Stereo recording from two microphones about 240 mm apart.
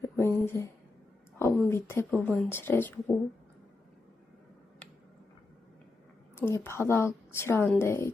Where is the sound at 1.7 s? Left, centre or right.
Centre.